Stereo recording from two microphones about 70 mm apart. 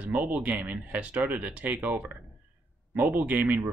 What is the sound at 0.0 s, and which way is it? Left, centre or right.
Speech, right.